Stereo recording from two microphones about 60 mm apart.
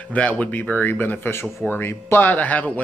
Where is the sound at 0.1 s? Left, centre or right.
Left.